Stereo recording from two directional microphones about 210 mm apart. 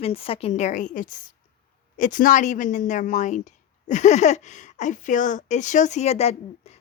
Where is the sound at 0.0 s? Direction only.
25° left (ahead or behind).